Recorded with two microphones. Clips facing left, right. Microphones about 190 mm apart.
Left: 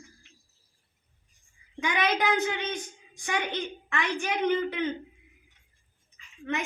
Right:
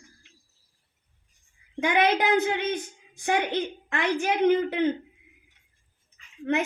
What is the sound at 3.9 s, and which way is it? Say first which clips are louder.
A woman's voice: right 5 dB; 55° right (ahead or behind).